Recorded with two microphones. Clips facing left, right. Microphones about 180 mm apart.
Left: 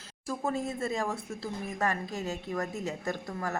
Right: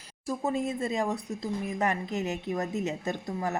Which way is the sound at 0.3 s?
20° right (ahead or behind).